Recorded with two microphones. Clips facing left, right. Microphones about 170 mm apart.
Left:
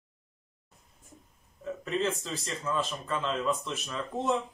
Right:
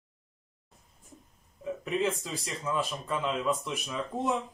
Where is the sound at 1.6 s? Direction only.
10° right (ahead or behind).